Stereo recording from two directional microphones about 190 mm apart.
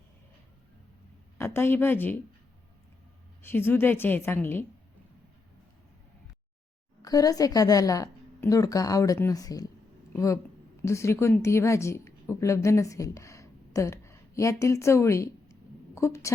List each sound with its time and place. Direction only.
1.4 s a woman's voice: 10° left (ahead or behind)
3.4 s a woman's voice: 10° left (ahead or behind)
7.0 s a woman's voice: 20° left (ahead or behind)